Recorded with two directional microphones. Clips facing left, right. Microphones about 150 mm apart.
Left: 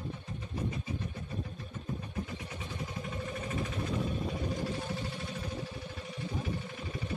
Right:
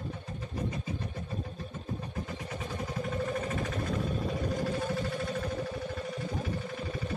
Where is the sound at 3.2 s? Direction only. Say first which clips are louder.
Right 8 dB; 50° right (ahead or behind).